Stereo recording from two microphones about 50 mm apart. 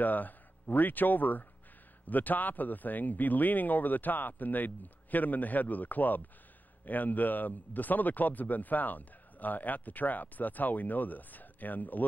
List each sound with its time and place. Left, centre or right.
0.0 s a man's voice: left